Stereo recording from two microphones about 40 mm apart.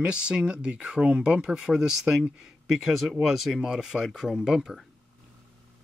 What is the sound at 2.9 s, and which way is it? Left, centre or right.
Speech, centre.